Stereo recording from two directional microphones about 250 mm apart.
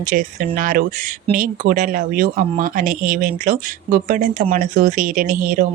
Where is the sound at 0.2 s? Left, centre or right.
Right.